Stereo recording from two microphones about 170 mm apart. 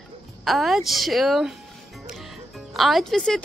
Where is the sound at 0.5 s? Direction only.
Centre (ahead or behind).